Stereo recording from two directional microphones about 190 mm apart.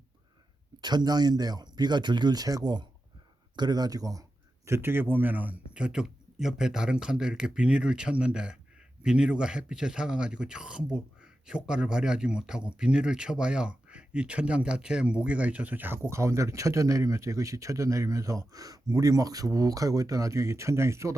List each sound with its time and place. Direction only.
0.8 s speech: 20° right (ahead or behind)